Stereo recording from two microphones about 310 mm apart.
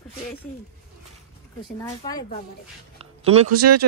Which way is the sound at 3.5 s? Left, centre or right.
Right.